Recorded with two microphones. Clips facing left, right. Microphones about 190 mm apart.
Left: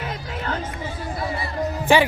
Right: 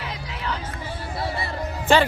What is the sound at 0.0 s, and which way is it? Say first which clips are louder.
Chatter: left 3 dB; 50° left (ahead or behind).